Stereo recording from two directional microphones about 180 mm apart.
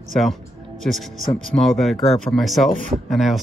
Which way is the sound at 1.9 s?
35° left (ahead or behind).